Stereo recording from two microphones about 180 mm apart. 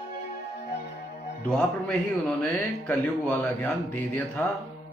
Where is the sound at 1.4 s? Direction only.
5° left (ahead or behind).